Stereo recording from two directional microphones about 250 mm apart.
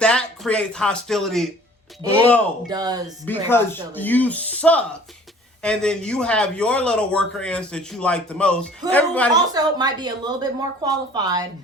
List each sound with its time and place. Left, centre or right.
0.0 s speech: centre
2.6 s a woman's voice: centre
3.2 s a man's voice: centre
9.5 s a woman's voice: centre